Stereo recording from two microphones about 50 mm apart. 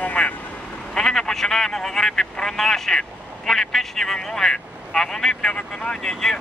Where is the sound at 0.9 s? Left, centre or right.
Centre.